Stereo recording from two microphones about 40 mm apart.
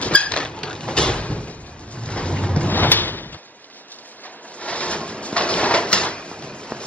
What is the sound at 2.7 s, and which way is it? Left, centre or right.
Sliding door, left.